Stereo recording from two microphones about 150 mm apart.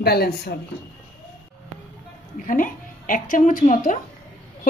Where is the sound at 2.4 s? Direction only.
60° left (ahead or behind).